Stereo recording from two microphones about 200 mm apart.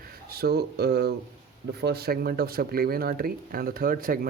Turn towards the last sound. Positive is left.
turn(degrees=-45)  # may be behind; listen again after turning